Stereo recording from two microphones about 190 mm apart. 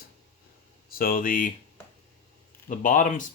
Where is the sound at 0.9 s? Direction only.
50° left (ahead or behind).